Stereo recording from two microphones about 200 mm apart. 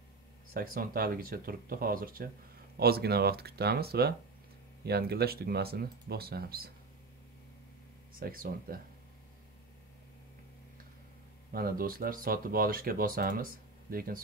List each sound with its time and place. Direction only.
0.5 s speech: 50° right (ahead or behind)
8.2 s speech: 45° right (ahead or behind)
11.5 s speech: 45° right (ahead or behind)